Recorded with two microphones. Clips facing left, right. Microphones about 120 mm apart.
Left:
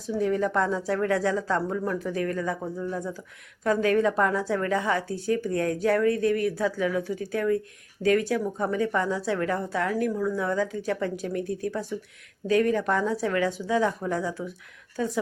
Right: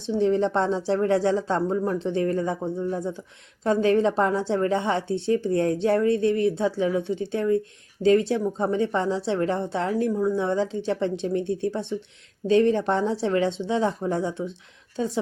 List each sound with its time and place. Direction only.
0.1 s a woman's voice: 25° right (ahead or behind)